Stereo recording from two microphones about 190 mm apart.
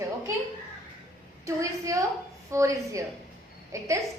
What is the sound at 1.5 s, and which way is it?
A woman's voice, 15° right (ahead or behind).